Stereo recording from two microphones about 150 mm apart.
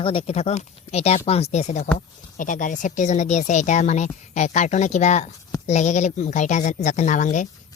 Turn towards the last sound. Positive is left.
turn(degrees=55)  # may be behind; listen again after turning